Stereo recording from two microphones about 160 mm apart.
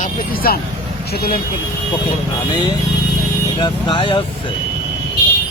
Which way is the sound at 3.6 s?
30° left (ahead or behind).